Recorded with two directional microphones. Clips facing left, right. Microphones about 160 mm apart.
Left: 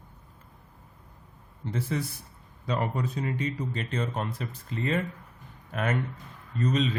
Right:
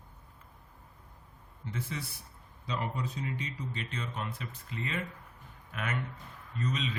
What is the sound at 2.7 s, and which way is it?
A man's voice, 50° left (ahead or behind).